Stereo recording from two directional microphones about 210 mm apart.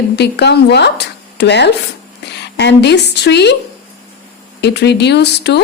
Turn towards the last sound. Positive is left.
turn(degrees=55)  # may be behind; listen again after turning